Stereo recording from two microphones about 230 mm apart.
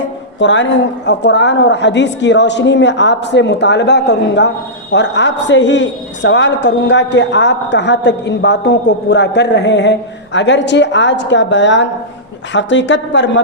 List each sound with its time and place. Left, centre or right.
0.3 s a woman's voice: left